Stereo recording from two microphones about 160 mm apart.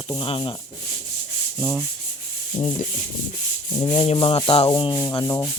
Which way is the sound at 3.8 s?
30° left (ahead or behind).